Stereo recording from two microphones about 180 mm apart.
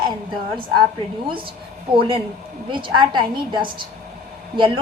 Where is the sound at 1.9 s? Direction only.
30° right (ahead or behind).